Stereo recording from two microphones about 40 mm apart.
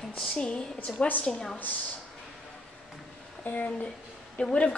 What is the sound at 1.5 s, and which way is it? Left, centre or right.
Speech, left.